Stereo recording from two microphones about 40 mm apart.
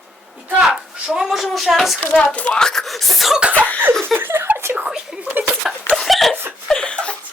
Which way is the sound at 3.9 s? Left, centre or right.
Centre.